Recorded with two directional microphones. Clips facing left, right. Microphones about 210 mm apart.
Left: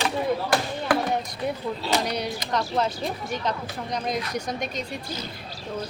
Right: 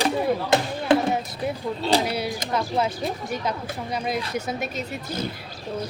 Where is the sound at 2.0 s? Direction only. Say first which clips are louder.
Right 2 dB; 5° right (ahead or behind).